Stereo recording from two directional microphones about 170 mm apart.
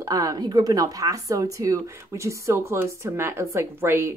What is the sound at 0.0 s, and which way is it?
Speech, 20° right (ahead or behind).